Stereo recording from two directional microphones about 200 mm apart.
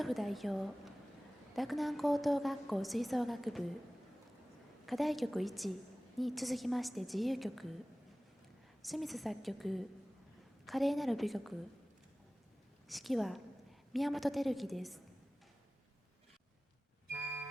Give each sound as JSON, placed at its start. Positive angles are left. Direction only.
{"t": 0.0, "sound": "a woman's voice", "side_deg": 0}
{"t": 4.9, "sound": "a woman's voice", "side_deg": 0}
{"t": 8.8, "sound": "a woman's voice", "side_deg": 0}
{"t": 12.9, "sound": "a woman's voice", "side_deg": 0}
{"t": 17.1, "sound": "a sound", "side_deg": -10}